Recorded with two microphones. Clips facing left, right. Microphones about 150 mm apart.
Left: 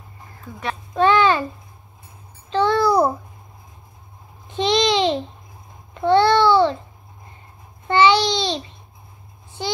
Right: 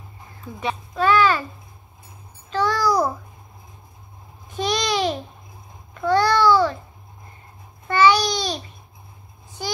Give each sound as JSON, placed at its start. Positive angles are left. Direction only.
{"t": 0.9, "sound": "a child's voice", "side_deg": 25}
{"t": 2.5, "sound": "babbling", "side_deg": 25}
{"t": 4.6, "sound": "babbling", "side_deg": 25}
{"t": 7.9, "sound": "babbling", "side_deg": 25}